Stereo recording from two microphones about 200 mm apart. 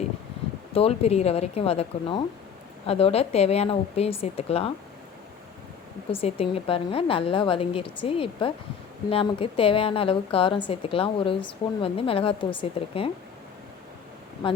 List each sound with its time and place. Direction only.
0.7 s a woman's voice: 30° left (ahead or behind)
6.1 s a woman's voice: 30° left (ahead or behind)